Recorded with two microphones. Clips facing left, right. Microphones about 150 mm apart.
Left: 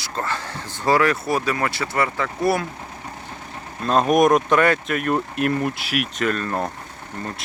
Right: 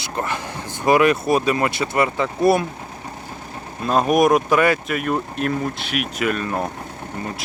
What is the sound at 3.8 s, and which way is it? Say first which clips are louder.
Speech: even; 5° right (ahead or behind).